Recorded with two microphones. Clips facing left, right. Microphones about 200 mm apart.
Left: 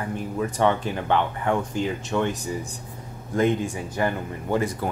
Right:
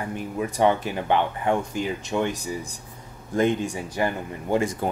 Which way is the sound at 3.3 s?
15° right (ahead or behind).